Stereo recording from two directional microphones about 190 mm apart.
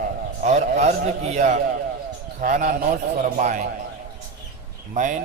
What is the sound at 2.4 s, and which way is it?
A man's voice, 45° right (ahead or behind).